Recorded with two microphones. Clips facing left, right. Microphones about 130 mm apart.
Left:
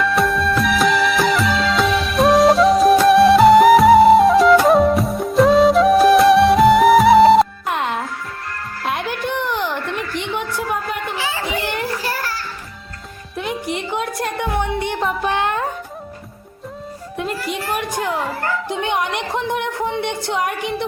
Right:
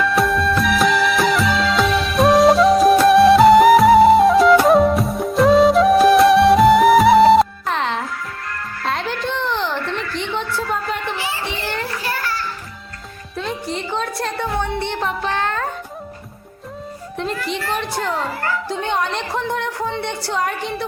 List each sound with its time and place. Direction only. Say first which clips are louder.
0.0 s music: even; centre (ahead or behind)
7.7 s music: even; 10° left (ahead or behind)
8.8 s a sound: even; 15° left (ahead or behind)
11.6 s children playing: left 2 dB; 15° left (ahead or behind)
13.3 s music: left 1 dB; 15° left (ahead or behind)
14.9 s music: left 2 dB; 5° left (ahead or behind)
15.3 s music: left 2 dB; 15° left (ahead or behind)
17.2 s a sound: even; 5° left (ahead or behind)
18.7 s music: left 1 dB; 15° left (ahead or behind)